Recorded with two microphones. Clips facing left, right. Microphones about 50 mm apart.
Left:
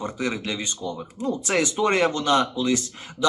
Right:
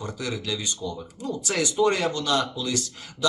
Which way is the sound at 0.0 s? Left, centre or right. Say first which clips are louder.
Left 4 dB; left.